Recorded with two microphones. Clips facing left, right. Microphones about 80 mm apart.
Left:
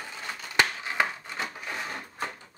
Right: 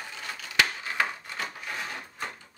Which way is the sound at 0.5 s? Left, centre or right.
Centre.